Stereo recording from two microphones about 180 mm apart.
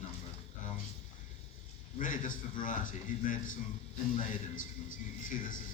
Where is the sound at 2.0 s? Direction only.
45° left (ahead or behind).